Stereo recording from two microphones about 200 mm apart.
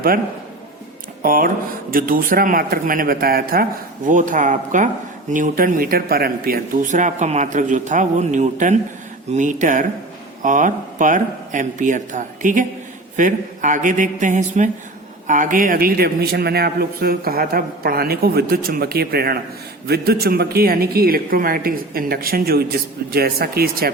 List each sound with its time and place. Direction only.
1.2 s a man's voice: 45° right (ahead or behind)